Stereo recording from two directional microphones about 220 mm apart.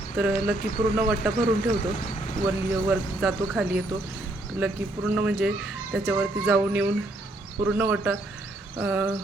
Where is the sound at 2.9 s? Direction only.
Centre (ahead or behind).